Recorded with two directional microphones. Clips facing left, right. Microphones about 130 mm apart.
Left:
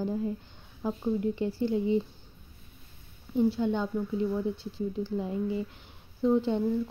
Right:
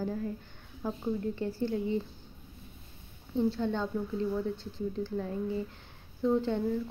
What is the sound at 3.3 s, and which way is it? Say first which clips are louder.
Speech: left 3 dB; 15° left (ahead or behind).